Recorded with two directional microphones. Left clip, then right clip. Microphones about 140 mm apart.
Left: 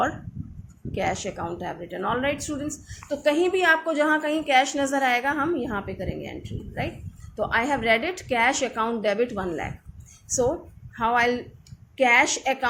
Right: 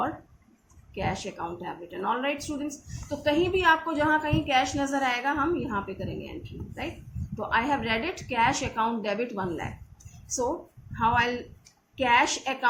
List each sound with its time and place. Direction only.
0.9 s a woman's voice: 45° left (ahead or behind)
7.3 s a woman's voice: 50° left (ahead or behind)